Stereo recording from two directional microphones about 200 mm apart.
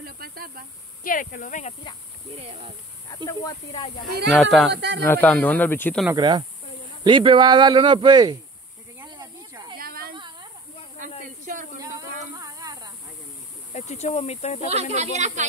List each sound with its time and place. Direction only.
0.0 s a sound: 50° right (ahead or behind)
1.0 s speech: 45° left (ahead or behind)
4.3 s speech: centre (ahead or behind)
4.7 s speech: 60° right (ahead or behind)
5.0 s speech: 10° left (ahead or behind)
6.1 s speech: 20° right (ahead or behind)
9.0 s snake: 20° right (ahead or behind)
9.8 s a sound: 50° right (ahead or behind)
11.2 s speech: 40° right (ahead or behind)
12.4 s a sound: 15° right (ahead or behind)
13.7 s speech: 35° left (ahead or behind)
14.7 s speech: 35° right (ahead or behind)